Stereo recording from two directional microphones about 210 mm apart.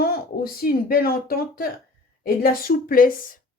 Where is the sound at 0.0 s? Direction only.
45° left (ahead or behind).